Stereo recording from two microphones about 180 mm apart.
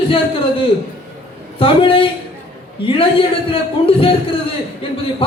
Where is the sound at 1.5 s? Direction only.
30° left (ahead or behind).